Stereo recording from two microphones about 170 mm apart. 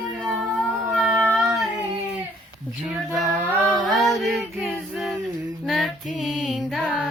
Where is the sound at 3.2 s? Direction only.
10° right (ahead or behind).